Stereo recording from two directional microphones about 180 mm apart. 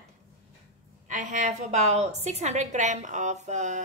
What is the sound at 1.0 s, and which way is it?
A woman's voice, 45° right (ahead or behind).